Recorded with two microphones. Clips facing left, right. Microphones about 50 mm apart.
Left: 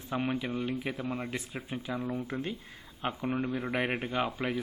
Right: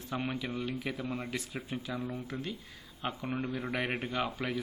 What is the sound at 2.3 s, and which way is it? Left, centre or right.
Speech, left.